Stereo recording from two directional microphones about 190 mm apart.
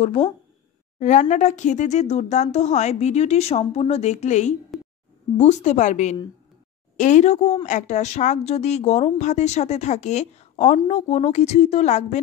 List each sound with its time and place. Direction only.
0.0 s speech: 30° left (ahead or behind)